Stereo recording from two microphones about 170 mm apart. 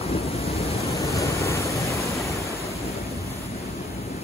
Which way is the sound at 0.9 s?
20° left (ahead or behind).